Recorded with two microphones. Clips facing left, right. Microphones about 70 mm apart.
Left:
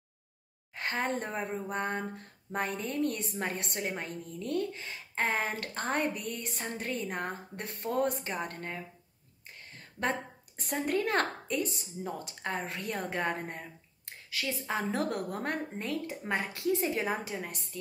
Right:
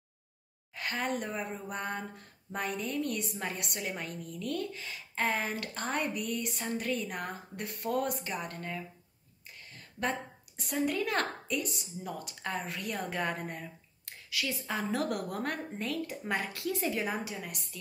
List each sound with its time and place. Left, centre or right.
0.7 s speech: left